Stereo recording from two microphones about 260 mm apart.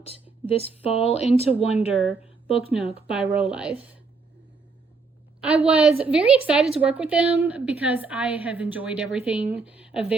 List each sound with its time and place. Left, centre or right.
0.0 s speech: left
3.1 s a woman's voice: centre
5.4 s a woman's voice: centre